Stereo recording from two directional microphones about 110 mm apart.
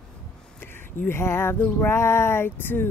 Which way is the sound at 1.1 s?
20° left (ahead or behind).